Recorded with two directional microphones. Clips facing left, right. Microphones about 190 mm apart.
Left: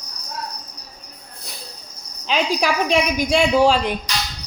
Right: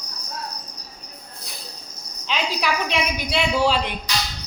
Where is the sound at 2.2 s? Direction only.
45° left (ahead or behind).